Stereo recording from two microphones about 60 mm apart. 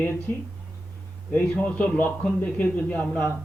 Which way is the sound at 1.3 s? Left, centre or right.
Left.